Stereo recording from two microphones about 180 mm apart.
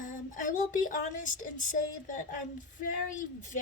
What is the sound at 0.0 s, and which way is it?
A woman's voice, 45° left (ahead or behind).